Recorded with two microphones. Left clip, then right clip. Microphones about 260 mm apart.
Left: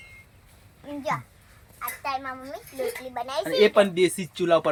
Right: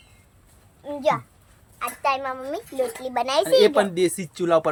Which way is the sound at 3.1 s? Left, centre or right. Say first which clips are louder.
Right 11 dB; right.